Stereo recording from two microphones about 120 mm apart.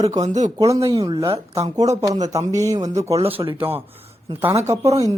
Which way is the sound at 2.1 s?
30° right (ahead or behind).